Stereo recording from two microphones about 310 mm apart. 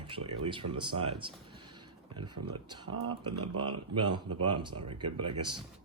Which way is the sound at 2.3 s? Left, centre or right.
Right.